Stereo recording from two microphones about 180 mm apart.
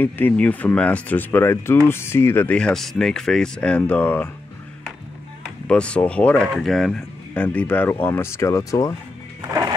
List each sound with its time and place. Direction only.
0.0 s speech: 10° left (ahead or behind)
5.7 s speech: 5° left (ahead or behind)
9.4 s music: 20° right (ahead or behind)